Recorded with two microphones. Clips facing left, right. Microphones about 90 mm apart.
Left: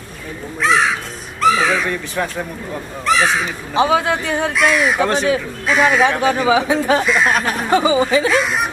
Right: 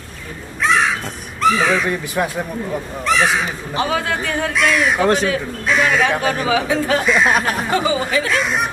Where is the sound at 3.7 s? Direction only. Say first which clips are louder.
Left 5 dB; 20° left (ahead or behind).